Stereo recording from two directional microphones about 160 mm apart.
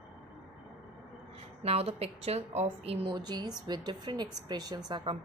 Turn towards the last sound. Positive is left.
turn(degrees=-30)  # may be behind; listen again after turning